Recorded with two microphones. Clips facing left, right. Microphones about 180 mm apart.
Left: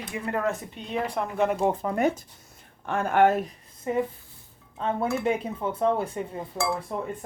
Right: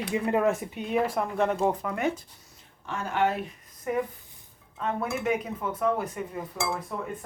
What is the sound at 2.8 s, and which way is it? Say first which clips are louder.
Speech: left 6 dB; 55° left (ahead or behind).